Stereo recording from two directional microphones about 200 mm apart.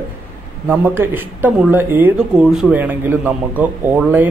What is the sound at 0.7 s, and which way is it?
Speech, 10° right (ahead or behind).